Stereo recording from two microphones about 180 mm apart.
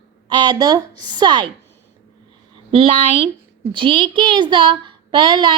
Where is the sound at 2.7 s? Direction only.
30° right (ahead or behind).